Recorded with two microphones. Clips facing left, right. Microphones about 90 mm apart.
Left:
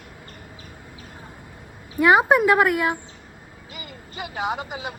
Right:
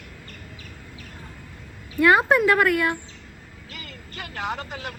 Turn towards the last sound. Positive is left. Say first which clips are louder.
# left 3 dB
turn(degrees=15)  # may be behind; listen again after turning